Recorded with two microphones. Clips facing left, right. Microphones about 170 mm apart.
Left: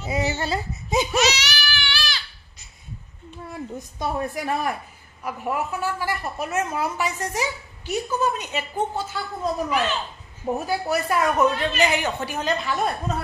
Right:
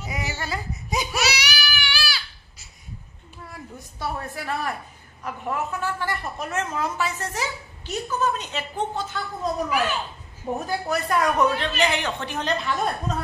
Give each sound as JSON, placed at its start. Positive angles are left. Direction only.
{"t": 0.0, "sound": "a sound", "side_deg": 25}
{"t": 1.1, "sound": "crying", "side_deg": -10}
{"t": 3.7, "sound": "a woman's voice", "side_deg": 15}
{"t": 9.7, "sound": "a child's voice", "side_deg": -10}
{"t": 10.7, "sound": "a woman's voice", "side_deg": 5}